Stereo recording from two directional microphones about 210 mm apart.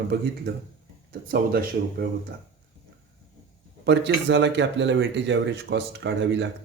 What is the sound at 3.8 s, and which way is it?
Speech, 55° right (ahead or behind).